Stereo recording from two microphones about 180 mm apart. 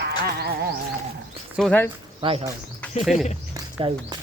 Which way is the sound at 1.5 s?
5° left (ahead or behind).